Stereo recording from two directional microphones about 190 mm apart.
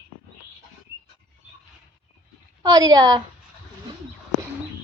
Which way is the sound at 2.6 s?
20° right (ahead or behind).